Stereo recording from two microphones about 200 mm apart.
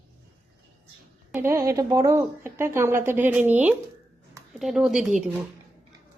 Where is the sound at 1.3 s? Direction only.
10° right (ahead or behind).